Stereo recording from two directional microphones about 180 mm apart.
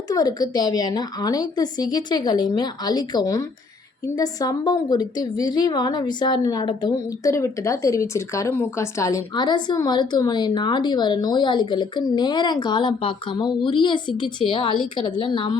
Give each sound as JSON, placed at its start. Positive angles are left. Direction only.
{"t": 0.1, "sound": "a woman's voice", "side_deg": 20}